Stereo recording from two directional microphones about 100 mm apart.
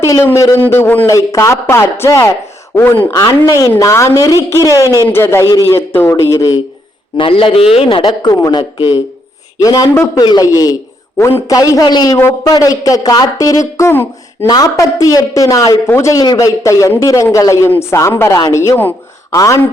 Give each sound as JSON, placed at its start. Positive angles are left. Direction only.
{"t": 0.0, "sound": "speech", "side_deg": 25}
{"t": 1.0, "sound": "speech", "side_deg": 35}
{"t": 3.1, "sound": "speech", "side_deg": 35}
{"t": 7.2, "sound": "a man's voice", "side_deg": 65}
{"t": 14.4, "sound": "speech", "side_deg": 40}
{"t": 16.2, "sound": "speech", "side_deg": 40}
{"t": 18.8, "sound": "a sound", "side_deg": 20}